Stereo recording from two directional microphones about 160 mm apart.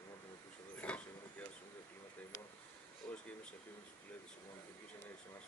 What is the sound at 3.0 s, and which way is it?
Speech, 10° left (ahead or behind).